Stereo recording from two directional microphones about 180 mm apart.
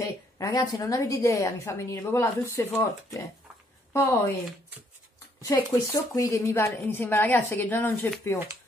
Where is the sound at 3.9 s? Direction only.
15° left (ahead or behind).